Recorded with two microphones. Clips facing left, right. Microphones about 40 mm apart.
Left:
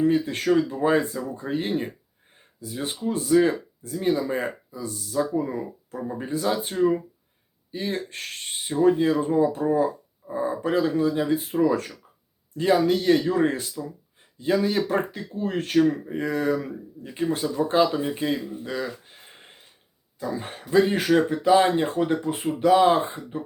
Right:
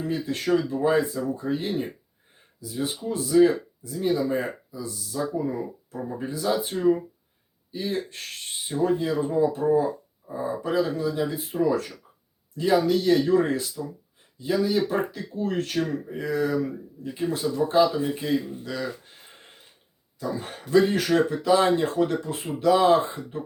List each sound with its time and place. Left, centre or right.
0.1 s speech: left
14.3 s speech: left
15.4 s speech: left
16.1 s speech: left
20.2 s speech: left